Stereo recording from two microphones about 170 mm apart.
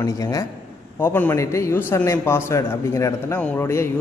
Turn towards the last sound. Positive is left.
turn(degrees=15)  # may be behind; listen again after turning